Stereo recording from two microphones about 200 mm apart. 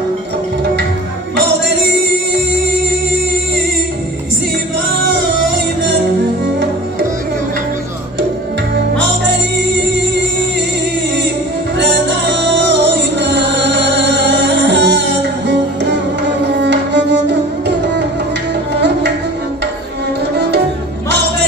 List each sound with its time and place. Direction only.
8.9 s music: 60° right (ahead or behind)
11.8 s music: 60° right (ahead or behind)